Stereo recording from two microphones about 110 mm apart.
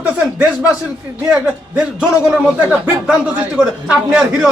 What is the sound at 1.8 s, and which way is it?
Speech, 10° right (ahead or behind).